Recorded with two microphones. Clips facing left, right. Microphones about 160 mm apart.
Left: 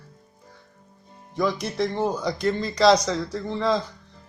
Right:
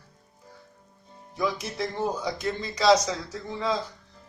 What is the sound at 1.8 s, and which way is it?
A man's voice, 70° left (ahead or behind).